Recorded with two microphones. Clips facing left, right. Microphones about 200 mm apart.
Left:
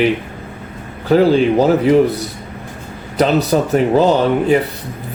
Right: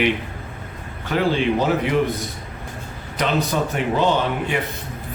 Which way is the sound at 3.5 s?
40° left (ahead or behind).